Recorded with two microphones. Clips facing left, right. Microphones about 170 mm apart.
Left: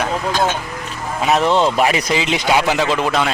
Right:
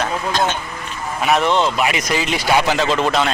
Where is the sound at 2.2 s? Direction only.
20° left (ahead or behind).